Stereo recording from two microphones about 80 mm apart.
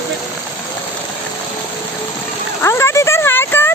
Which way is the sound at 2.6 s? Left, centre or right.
Left.